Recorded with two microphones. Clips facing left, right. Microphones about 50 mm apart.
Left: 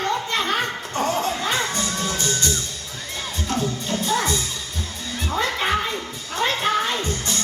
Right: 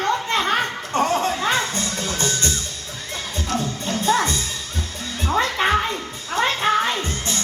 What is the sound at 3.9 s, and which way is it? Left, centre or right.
Music, right.